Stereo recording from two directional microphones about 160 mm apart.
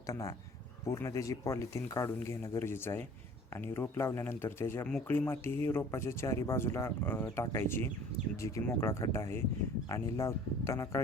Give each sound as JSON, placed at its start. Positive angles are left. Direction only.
{"t": 0.1, "sound": "speech", "side_deg": 20}